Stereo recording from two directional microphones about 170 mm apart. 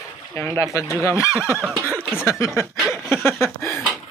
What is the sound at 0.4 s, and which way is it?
Speech, 15° left (ahead or behind).